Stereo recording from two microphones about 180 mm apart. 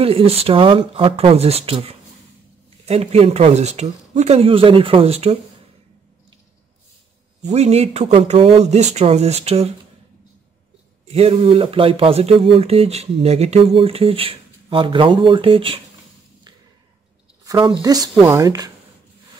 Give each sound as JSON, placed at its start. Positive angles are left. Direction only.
{"t": 0.0, "sound": "speech", "side_deg": -30}
{"t": 7.4, "sound": "speech", "side_deg": -35}
{"t": 11.1, "sound": "speech", "side_deg": -35}
{"t": 17.5, "sound": "speech", "side_deg": -25}